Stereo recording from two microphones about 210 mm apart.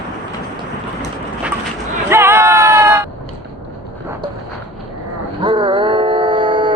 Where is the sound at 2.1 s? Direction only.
10° right (ahead or behind).